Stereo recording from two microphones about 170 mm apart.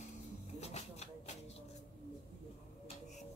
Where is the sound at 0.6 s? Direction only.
40° left (ahead or behind).